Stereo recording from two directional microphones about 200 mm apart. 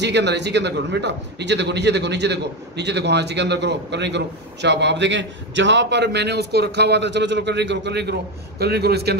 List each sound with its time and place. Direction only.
0.0 s a man's voice: 60° right (ahead or behind)